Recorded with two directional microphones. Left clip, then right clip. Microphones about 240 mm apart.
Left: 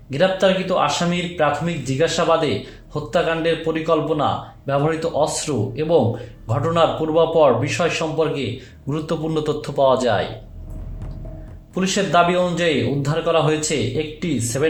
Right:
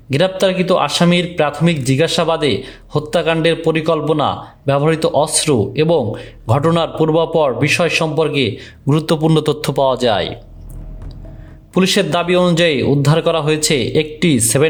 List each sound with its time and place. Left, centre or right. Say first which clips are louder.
0.1 s speech: right 2 dB; right
11.7 s speech: right 4 dB; right